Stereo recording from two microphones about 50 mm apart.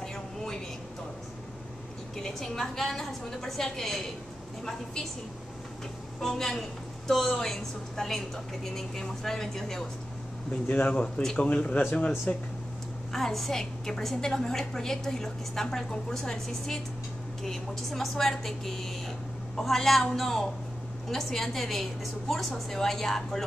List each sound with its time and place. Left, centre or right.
0.0 s a sound: centre
2.1 s a woman's voice: centre
6.2 s a woman's voice: centre
10.7 s speech: left
13.1 s a woman's voice: centre